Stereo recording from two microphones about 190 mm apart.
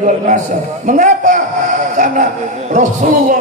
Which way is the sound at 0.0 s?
40° right (ahead or behind).